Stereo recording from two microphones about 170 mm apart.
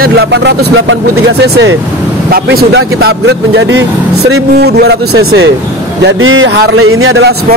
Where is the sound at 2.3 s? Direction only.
65° right (ahead or behind); by 3.9 s 90° right.